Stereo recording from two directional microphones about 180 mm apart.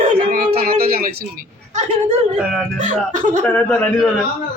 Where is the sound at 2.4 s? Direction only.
5° right (ahead or behind).